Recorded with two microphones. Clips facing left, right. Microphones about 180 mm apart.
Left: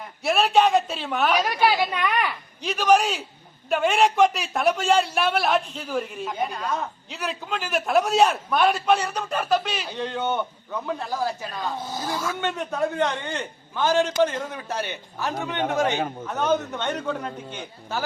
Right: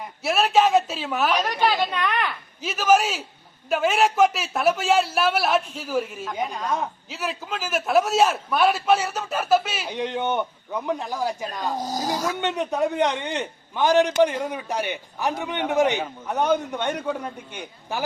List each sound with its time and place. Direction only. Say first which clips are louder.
0.2 s a man's voice: even; centre (ahead or behind)
1.3 s a woman's voice: left 2 dB; 10° left (ahead or behind)
2.6 s a man's voice: even; 5° right (ahead or behind)
7.1 s a man's voice: even; centre (ahead or behind)
9.9 s a man's voice: right 2 dB; 15° right (ahead or behind)
11.7 s speech: right 6 dB; 40° right (ahead or behind)
12.4 s a man's voice: right 1 dB; 20° right (ahead or behind)